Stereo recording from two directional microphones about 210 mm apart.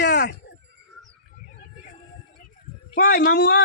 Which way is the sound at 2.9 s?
45° left (ahead or behind).